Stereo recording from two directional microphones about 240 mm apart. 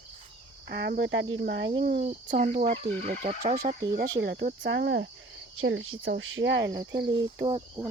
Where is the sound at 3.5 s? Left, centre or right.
Right.